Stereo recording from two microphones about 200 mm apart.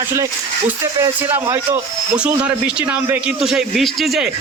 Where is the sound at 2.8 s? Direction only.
5° right (ahead or behind).